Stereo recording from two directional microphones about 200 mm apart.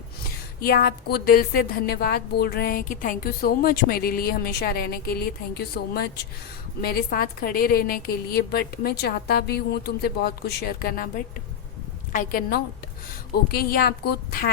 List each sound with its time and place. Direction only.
0.6 s a woman's voice: 50° left (ahead or behind)
12.1 s a woman's voice: 45° left (ahead or behind)